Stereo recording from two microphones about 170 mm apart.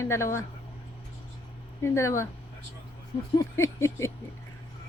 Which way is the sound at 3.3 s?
15° left (ahead or behind).